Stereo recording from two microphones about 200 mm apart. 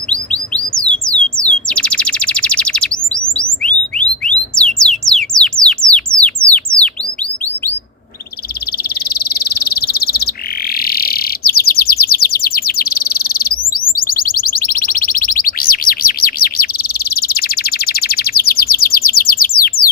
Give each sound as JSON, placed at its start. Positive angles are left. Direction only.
{"t": 0.1, "sound": "bird", "side_deg": 5}
{"t": 0.9, "sound": "a sound", "side_deg": 5}
{"t": 1.6, "sound": "chirp", "side_deg": 5}
{"t": 3.3, "sound": "music", "side_deg": 5}
{"t": 8.8, "sound": "frog", "side_deg": 50}